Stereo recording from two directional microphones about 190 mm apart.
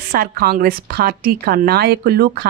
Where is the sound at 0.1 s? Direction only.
55° right (ahead or behind).